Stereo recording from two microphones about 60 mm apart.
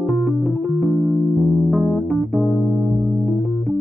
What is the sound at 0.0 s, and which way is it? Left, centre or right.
Keyboard, centre.